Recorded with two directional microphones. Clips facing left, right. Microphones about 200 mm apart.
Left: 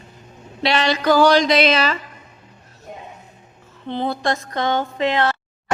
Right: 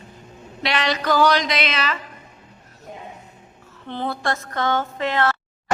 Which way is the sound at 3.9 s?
15° left (ahead or behind).